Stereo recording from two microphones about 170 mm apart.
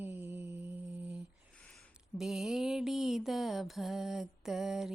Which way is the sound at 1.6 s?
Centre (ahead or behind).